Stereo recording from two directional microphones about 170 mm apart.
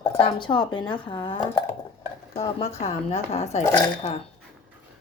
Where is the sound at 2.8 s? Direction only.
40° left (ahead or behind).